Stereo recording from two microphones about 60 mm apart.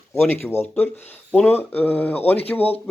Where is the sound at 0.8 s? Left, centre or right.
Left.